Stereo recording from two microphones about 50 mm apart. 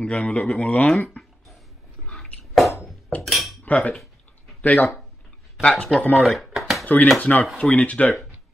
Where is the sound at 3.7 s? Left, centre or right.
Left.